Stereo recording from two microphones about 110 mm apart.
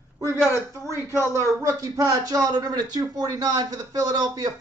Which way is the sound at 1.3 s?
30° right (ahead or behind).